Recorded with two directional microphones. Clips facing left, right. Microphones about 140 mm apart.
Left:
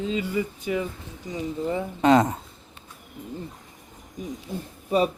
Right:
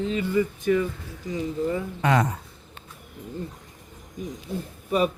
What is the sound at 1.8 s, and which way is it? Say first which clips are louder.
Speech: left 7 dB; 25° left (ahead or behind).